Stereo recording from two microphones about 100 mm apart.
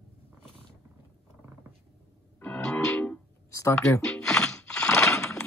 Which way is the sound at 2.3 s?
15° left (ahead or behind).